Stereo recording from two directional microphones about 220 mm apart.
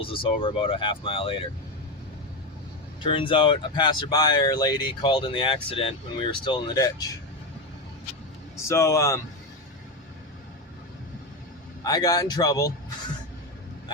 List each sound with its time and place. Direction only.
0.0 s speech: 25° left (ahead or behind)
3.0 s speech: 25° left (ahead or behind)
8.6 s a man's voice: 15° left (ahead or behind)
11.8 s a man's voice: 15° left (ahead or behind)